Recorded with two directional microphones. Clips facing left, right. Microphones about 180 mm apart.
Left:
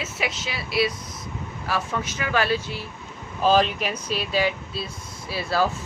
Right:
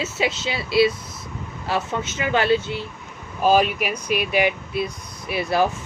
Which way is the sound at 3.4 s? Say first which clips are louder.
Right 2 dB; 10° right (ahead or behind).